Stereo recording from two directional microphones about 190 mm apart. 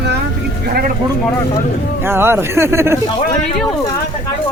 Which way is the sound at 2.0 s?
10° right (ahead or behind).